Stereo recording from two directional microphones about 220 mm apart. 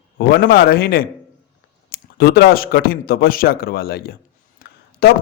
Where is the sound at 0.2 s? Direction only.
45° left (ahead or behind).